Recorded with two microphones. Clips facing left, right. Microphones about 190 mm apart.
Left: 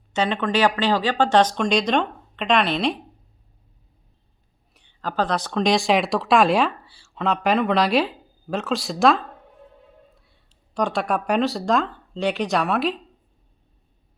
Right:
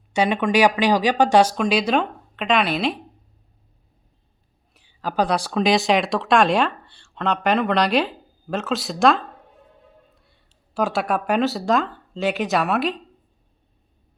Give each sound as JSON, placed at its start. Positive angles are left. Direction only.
{"t": 0.1, "sound": "speech", "side_deg": -10}
{"t": 4.7, "sound": "speech", "side_deg": -5}